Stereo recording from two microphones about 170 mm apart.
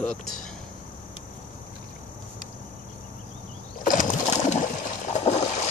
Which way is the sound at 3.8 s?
55° left (ahead or behind).